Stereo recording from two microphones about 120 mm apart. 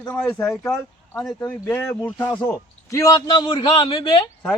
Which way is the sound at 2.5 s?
25° left (ahead or behind).